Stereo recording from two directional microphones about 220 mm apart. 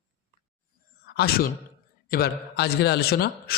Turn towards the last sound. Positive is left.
turn(degrees=45)  # may be behind; listen again after turning